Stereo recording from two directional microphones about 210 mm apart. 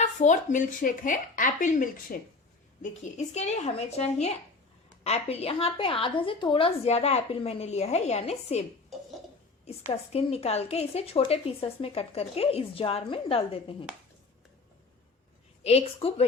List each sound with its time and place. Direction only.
0.0 s a woman's voice: 35° left (ahead or behind)
9.9 s a woman's voice: 30° left (ahead or behind)
15.6 s a woman's voice: 30° left (ahead or behind)